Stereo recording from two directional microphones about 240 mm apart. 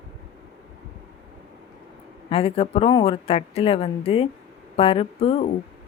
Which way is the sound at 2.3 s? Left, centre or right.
Left.